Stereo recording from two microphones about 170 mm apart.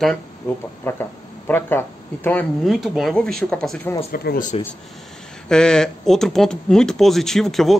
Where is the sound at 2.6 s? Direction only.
Centre (ahead or behind).